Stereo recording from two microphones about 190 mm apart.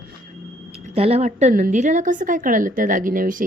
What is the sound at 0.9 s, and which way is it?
A woman's voice, 30° right (ahead or behind).